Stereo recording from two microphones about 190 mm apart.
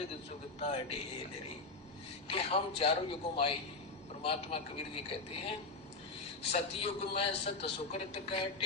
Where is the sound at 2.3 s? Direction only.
30° left (ahead or behind).